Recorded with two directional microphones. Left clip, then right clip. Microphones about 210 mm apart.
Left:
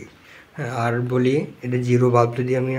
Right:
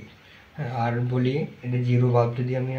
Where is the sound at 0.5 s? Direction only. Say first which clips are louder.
Left 4 dB; 45° left (ahead or behind).